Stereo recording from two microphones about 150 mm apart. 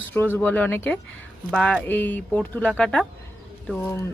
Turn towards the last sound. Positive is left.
turn(degrees=10)  # may be behind; listen again after turning